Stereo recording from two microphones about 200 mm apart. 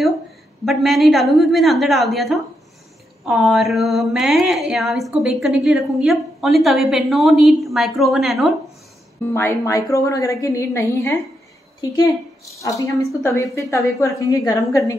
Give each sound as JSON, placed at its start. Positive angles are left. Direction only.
{"t": 0.7, "sound": "a woman's voice", "side_deg": 0}
{"t": 9.3, "sound": "a woman's voice", "side_deg": 15}
{"t": 12.5, "sound": "a woman's voice", "side_deg": 15}